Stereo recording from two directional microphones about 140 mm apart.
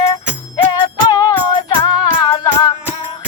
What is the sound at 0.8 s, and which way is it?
Music, 25° left (ahead or behind).